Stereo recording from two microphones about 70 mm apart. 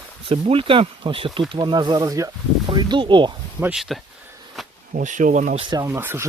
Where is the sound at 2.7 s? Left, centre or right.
Right.